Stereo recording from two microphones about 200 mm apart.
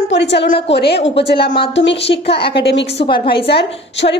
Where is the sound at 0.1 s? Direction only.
60° left (ahead or behind).